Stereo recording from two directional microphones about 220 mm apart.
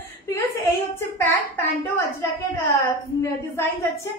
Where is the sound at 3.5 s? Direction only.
15° left (ahead or behind).